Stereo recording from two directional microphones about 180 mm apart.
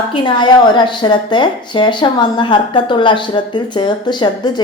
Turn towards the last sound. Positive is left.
turn(degrees=25)  # may be behind; listen again after turning